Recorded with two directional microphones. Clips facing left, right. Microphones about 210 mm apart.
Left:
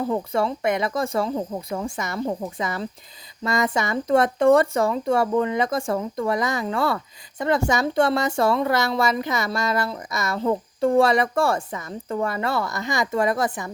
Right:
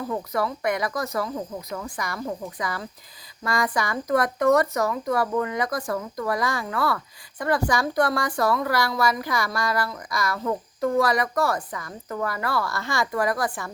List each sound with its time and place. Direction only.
0.1 s speech: 25° left (ahead or behind)